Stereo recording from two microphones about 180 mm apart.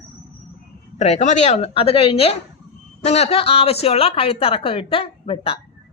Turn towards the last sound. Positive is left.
turn(degrees=30)  # may be behind; listen again after turning